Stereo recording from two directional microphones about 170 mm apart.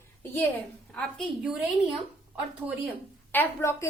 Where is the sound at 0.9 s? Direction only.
5° left (ahead or behind).